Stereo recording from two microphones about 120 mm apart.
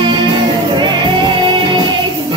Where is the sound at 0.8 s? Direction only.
40° right (ahead or behind).